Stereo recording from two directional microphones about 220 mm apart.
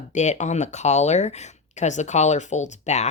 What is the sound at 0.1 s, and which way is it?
Speech, 30° left (ahead or behind).